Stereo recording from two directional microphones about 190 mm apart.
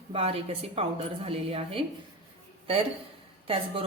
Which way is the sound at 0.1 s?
30° right (ahead or behind).